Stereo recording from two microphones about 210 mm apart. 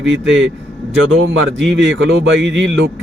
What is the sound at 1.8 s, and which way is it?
A man's voice, 60° right (ahead or behind).